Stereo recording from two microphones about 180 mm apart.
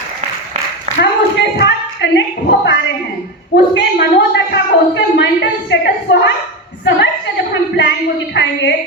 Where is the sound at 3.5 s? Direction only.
70° left (ahead or behind).